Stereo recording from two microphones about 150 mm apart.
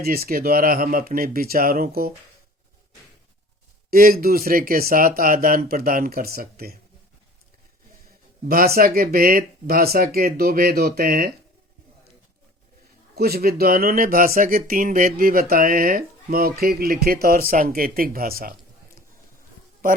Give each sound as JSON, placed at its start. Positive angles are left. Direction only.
{"t": 0.0, "sound": "speech", "side_deg": -80}
{"t": 3.8, "sound": "speech", "side_deg": -75}
{"t": 8.4, "sound": "speech", "side_deg": -90}
{"t": 13.1, "sound": "speech", "side_deg": -90}